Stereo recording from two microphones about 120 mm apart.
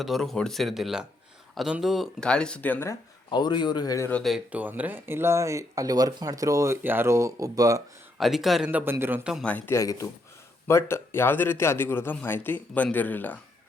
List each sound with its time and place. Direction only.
0.0 s speech: centre (ahead or behind)
3.2 s speech: 40° left (ahead or behind)
4.1 s speech: centre (ahead or behind)
4.5 s speech: 15° right (ahead or behind); by 7.8 s 30° right (ahead or behind)
8.2 s speech: centre (ahead or behind)
8.8 s a man's voice: 20° right (ahead or behind)
9.4 s speech: 15° left (ahead or behind)
9.7 s a man's voice: 25° left (ahead or behind)